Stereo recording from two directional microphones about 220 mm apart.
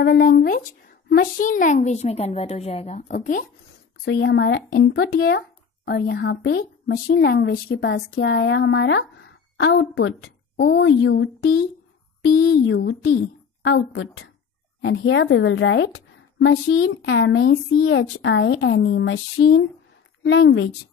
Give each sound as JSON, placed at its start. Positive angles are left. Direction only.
{"t": 0.0, "sound": "speech", "side_deg": 45}
{"t": 4.0, "sound": "a woman's voice", "side_deg": 50}